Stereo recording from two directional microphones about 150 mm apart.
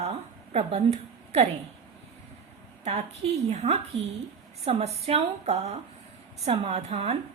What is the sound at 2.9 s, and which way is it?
A woman's voice, 45° right (ahead or behind).